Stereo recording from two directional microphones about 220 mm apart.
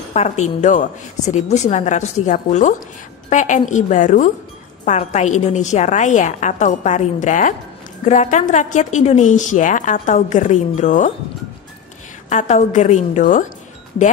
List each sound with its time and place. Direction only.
0.1 s a woman's voice: 30° left (ahead or behind)
12.3 s a woman's voice: 35° left (ahead or behind)